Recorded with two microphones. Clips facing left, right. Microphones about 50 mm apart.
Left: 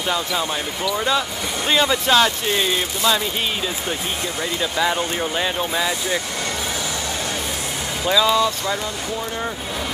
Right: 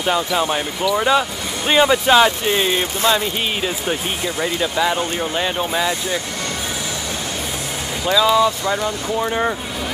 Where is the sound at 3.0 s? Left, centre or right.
Right.